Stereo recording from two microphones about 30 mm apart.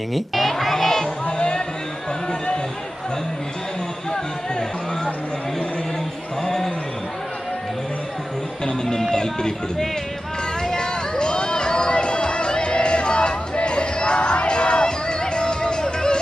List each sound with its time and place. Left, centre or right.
0.1 s crowd: centre
1.4 s a sound: left
8.6 s music: left
9.0 s speech: centre
10.6 s music: left